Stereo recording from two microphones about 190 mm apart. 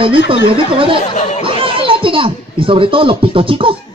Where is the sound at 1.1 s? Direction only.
40° left (ahead or behind).